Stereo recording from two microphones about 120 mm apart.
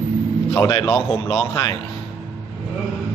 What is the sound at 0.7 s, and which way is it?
A man's voice, 35° left (ahead or behind).